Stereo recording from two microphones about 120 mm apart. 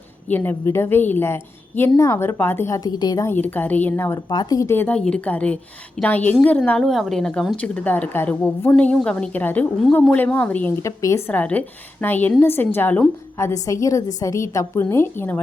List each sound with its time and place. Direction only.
0.3 s a woman's voice: 15° left (ahead or behind); by 3.2 s 35° left (ahead or behind)
3.2 s a woman's voice: 15° left (ahead or behind)
4.3 s a woman's voice: 35° left (ahead or behind); by 6.3 s 15° left (ahead or behind)
6.7 s a woman's voice: 5° left (ahead or behind)
10.8 s a woman's voice: 25° left (ahead or behind)
13.3 s a woman's voice: 25° left (ahead or behind)